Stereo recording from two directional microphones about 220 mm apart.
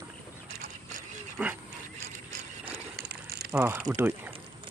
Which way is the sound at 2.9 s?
45° right (ahead or behind).